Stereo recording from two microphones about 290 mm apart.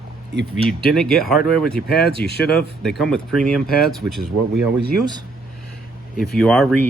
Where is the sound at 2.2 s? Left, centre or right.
Left.